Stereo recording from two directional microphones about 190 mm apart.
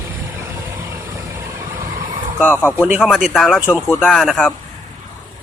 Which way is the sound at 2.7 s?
10° right (ahead or behind).